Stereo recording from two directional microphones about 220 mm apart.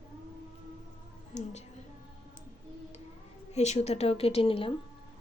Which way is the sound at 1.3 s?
30° left (ahead or behind).